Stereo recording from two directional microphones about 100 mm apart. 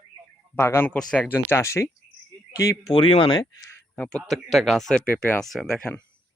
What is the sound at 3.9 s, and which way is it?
A man's voice, 5° left (ahead or behind).